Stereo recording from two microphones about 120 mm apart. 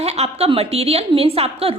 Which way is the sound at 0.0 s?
60° right (ahead or behind).